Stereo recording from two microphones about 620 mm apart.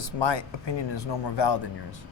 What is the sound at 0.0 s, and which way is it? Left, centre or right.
A man's voice, left.